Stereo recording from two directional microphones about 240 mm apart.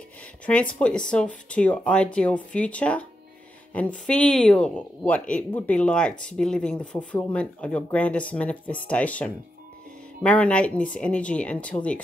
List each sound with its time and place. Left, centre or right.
0.5 s speech: centre